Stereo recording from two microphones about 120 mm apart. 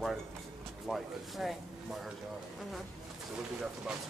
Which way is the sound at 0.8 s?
Centre (ahead or behind).